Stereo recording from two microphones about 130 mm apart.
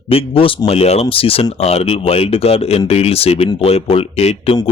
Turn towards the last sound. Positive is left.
turn(degrees=50)  # may be behind; listen again after turning